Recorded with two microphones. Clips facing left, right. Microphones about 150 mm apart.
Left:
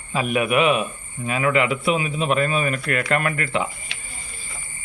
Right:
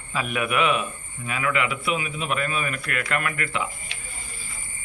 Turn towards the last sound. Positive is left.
turn(degrees=30)  # may be behind; listen again after turning